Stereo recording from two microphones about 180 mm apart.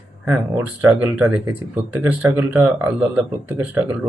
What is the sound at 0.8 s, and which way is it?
Speech, 10° right (ahead or behind).